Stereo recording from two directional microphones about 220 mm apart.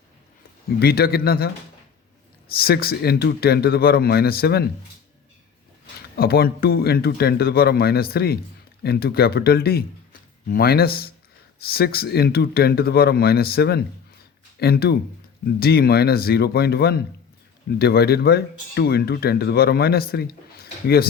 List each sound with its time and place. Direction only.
0.8 s speech: 45° left (ahead or behind)
2.6 s speech: 45° left (ahead or behind)
6.1 s a man's voice: 45° left (ahead or behind)